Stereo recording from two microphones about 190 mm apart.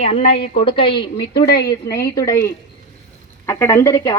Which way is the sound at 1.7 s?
20° left (ahead or behind).